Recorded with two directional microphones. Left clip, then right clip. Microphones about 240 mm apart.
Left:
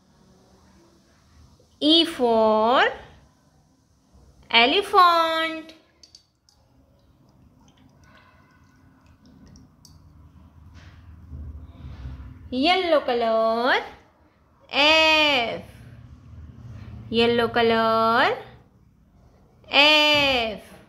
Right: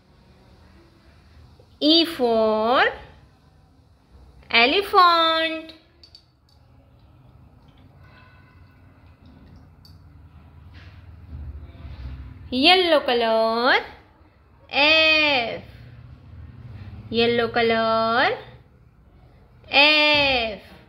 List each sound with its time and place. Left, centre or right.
1.8 s a woman's voice: centre
4.5 s a woman's voice: centre
12.4 s a woman's voice: centre
14.7 s speech: centre
17.1 s speech: centre
19.6 s speech: centre